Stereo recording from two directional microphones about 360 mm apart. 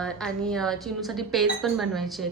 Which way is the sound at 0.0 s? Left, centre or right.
Centre.